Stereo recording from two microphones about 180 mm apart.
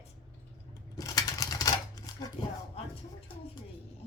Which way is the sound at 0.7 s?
20° left (ahead or behind).